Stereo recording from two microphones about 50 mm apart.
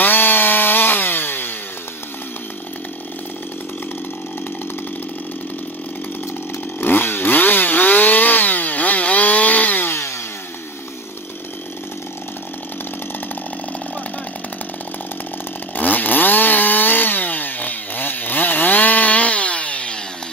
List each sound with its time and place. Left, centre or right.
0.0 s chainsaw: left
6.8 s chainsaw: left
15.7 s chainsaw: left